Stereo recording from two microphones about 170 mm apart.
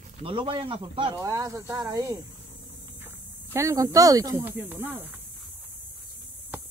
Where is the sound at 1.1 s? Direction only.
20° right (ahead or behind).